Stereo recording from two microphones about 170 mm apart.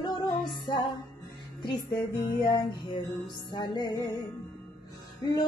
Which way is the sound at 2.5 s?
25° left (ahead or behind).